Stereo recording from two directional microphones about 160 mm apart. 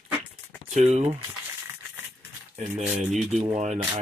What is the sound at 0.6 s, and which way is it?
Speech, 45° right (ahead or behind).